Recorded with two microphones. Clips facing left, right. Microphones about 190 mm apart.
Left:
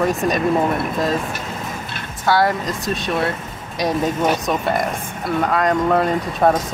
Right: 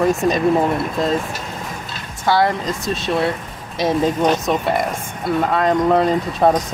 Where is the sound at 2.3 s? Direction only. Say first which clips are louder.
Right 1 dB; centre (ahead or behind).